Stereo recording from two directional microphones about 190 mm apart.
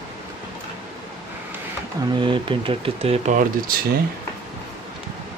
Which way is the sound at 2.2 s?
25° right (ahead or behind).